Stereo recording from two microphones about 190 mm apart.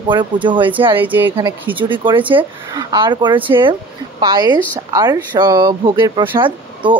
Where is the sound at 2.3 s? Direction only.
25° right (ahead or behind).